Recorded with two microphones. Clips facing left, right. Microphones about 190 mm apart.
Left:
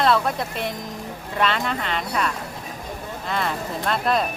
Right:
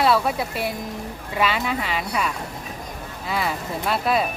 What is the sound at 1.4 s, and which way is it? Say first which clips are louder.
Speech: even; 5° right (ahead or behind).